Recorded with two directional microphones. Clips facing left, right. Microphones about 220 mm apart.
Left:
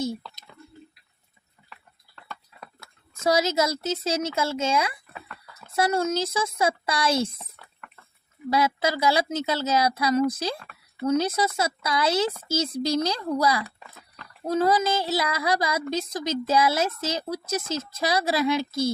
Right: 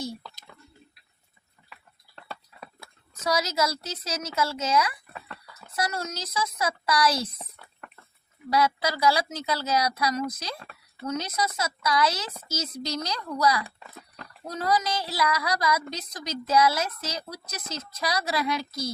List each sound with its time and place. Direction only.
3.2 s a woman's voice: 25° left (ahead or behind)
8.5 s a woman's voice: 25° left (ahead or behind)